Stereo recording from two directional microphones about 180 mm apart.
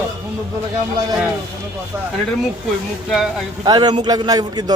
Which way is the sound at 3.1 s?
Centre (ahead or behind).